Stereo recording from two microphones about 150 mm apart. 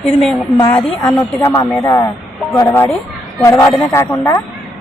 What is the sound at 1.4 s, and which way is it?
Speech, 20° left (ahead or behind).